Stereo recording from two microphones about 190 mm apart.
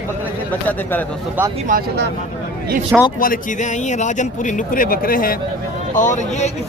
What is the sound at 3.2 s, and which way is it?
A man's voice, 45° left (ahead or behind).